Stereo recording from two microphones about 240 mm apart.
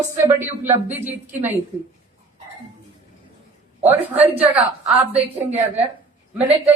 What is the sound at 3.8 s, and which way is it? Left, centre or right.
A woman's voice, centre.